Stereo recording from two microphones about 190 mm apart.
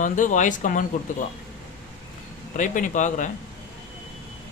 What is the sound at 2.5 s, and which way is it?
Speech, 40° left (ahead or behind).